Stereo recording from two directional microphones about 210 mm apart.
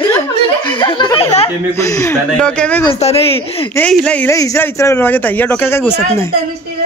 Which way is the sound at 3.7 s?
5° left (ahead or behind).